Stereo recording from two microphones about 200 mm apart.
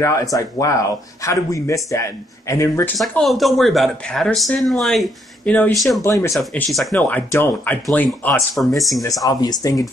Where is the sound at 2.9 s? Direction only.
Centre (ahead or behind).